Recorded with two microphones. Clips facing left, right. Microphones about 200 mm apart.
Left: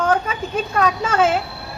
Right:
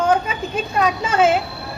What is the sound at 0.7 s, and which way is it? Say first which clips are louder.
Speech: even; 10° right (ahead or behind).